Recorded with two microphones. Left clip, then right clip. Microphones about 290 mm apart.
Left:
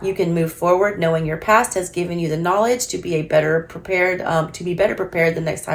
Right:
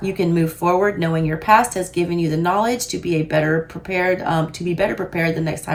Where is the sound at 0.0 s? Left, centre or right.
Centre.